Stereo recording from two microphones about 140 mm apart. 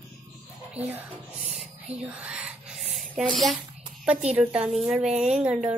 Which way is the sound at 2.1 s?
5° right (ahead or behind).